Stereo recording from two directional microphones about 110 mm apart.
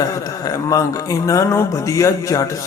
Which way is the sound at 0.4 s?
35° left (ahead or behind).